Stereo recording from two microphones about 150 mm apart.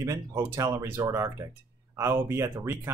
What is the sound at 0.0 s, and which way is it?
Speech, 20° right (ahead or behind).